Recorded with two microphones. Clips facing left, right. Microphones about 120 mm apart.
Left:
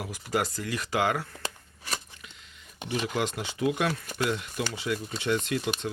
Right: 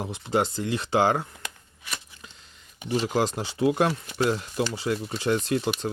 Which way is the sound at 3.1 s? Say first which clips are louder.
Right 5 dB; 35° right (ahead or behind).